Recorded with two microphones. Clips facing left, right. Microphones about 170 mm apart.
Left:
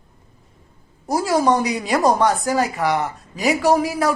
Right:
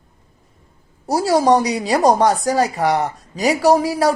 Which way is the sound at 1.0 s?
35° right (ahead or behind).